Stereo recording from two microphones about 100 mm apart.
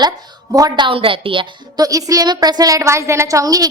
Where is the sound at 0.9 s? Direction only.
60° right (ahead or behind).